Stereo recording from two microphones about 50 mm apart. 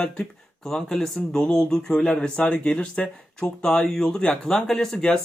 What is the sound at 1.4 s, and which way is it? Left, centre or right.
Speech, centre.